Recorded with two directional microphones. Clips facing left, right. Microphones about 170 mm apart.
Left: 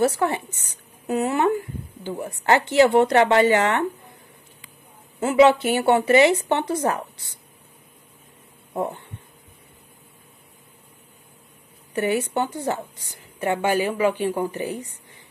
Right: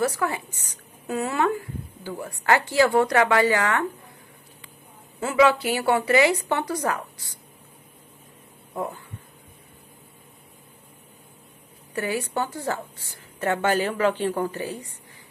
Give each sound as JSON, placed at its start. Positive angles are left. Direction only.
{"t": 0.0, "sound": "a woman's voice", "side_deg": 25}
{"t": 5.2, "sound": "a woman's voice", "side_deg": 25}
{"t": 8.7, "sound": "speech", "side_deg": 30}
{"t": 11.9, "sound": "a woman's voice", "side_deg": 20}